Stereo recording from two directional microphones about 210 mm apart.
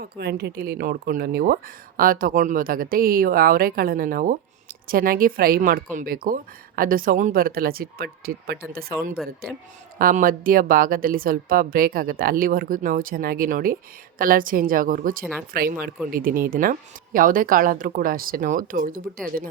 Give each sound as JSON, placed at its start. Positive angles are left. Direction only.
{"t": 0.0, "sound": "speech", "side_deg": -50}
{"t": 10.0, "sound": "speech", "side_deg": -40}
{"t": 15.2, "sound": "speech", "side_deg": 5}
{"t": 15.5, "sound": "speech", "side_deg": -45}